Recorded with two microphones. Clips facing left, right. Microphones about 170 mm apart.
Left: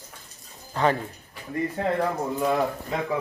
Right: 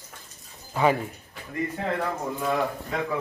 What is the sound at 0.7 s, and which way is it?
Speech, 10° right (ahead or behind).